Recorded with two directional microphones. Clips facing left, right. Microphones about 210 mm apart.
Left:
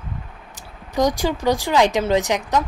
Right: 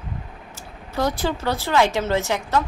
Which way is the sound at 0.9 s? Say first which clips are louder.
Left 4 dB; 15° left (ahead or behind).